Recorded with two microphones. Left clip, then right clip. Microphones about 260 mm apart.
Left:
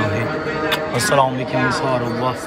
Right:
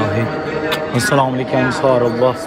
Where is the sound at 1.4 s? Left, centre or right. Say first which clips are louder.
Right 2 dB; centre.